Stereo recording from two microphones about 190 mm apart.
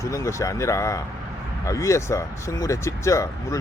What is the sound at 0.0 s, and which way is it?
Speech, 15° left (ahead or behind).